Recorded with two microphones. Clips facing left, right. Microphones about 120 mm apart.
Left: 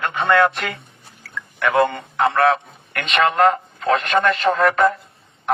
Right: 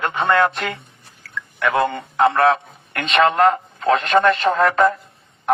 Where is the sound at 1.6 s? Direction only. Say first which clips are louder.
Left 1 dB; 25° right (ahead or behind).